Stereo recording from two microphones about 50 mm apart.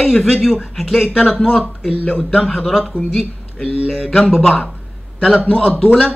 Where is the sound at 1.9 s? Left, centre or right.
Left.